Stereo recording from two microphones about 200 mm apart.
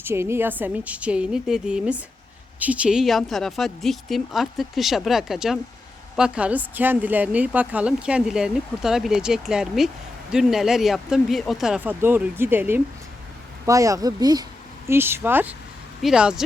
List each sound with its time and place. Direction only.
0.0 s a woman's voice: 10° right (ahead or behind)